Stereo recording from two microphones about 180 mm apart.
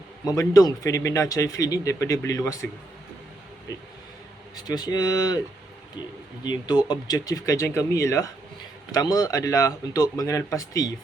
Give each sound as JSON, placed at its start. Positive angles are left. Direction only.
{"t": 0.3, "sound": "speech", "side_deg": 20}
{"t": 4.5, "sound": "speech", "side_deg": 20}
{"t": 6.4, "sound": "speech", "side_deg": 25}